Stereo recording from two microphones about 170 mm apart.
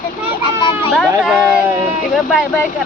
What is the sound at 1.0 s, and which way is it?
Speech, 5° right (ahead or behind).